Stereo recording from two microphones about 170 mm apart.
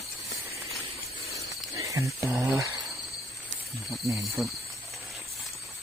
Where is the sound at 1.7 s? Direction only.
20° right (ahead or behind).